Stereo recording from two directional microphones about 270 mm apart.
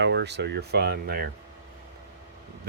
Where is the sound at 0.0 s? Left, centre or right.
Right.